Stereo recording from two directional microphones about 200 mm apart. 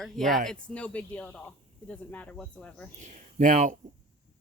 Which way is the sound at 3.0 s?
40° right (ahead or behind).